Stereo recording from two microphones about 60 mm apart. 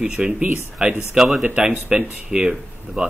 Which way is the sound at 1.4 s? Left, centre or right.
Right.